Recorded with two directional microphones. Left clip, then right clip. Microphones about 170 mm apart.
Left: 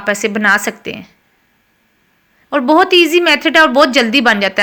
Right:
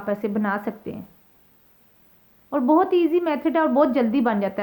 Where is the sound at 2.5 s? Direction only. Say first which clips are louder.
Left 9 dB; 20° left (ahead or behind).